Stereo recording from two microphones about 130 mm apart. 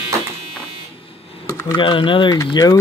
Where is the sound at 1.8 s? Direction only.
40° left (ahead or behind).